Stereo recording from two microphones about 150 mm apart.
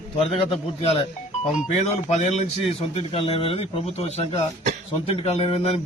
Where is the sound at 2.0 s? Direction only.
50° left (ahead or behind).